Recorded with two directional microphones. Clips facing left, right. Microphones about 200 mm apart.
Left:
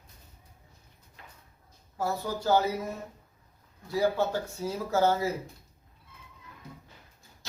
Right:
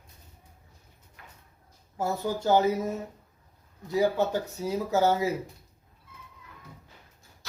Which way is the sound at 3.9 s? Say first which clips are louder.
Right 2 dB; 20° right (ahead or behind).